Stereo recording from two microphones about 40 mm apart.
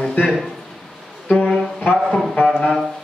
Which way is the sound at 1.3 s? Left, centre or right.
Centre.